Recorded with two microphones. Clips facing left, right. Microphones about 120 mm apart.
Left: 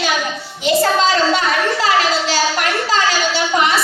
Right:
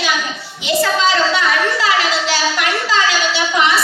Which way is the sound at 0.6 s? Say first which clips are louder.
Left 2 dB; 45° left (ahead or behind).